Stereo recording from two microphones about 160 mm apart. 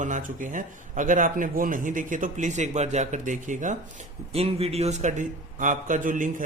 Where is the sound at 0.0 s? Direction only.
55° right (ahead or behind).